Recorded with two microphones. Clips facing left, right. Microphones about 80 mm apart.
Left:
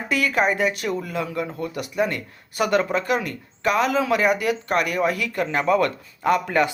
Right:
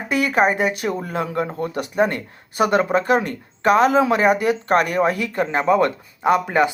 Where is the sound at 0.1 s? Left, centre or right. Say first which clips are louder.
Right 3 dB; right.